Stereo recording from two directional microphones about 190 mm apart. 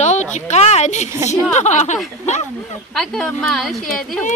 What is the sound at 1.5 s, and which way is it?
Speech, 40° left (ahead or behind).